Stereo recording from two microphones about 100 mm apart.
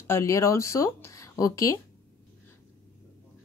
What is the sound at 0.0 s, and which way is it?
Speech, 25° left (ahead or behind).